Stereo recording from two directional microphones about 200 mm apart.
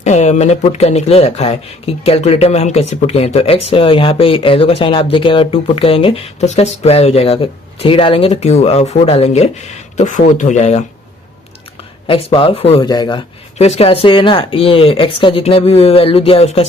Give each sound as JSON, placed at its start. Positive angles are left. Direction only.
{"t": 0.0, "sound": "speech", "side_deg": 35}
{"t": 12.0, "sound": "speech", "side_deg": 25}